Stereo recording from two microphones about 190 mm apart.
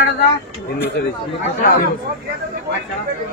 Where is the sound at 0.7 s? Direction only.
60° left (ahead or behind).